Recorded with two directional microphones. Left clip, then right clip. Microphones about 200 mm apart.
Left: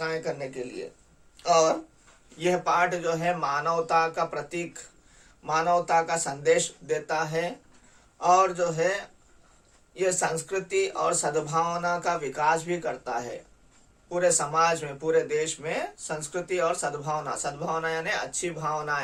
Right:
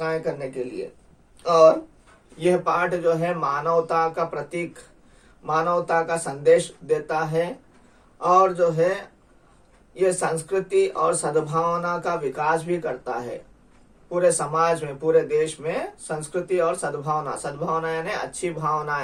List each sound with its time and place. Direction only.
0.0 s speech: 20° left (ahead or behind)